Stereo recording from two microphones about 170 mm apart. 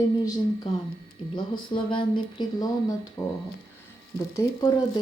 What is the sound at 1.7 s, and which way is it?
Speech, 30° left (ahead or behind).